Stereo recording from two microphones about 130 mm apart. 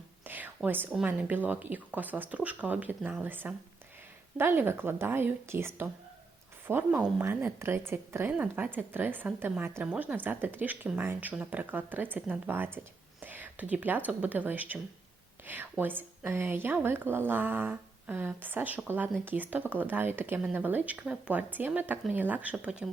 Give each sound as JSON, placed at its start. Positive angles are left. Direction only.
{"t": 0.3, "sound": "whispering", "side_deg": -15}
{"t": 1.0, "sound": "a woman's voice", "side_deg": -15}